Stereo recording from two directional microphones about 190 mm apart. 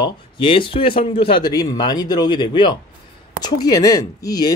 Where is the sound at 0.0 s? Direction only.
25° left (ahead or behind).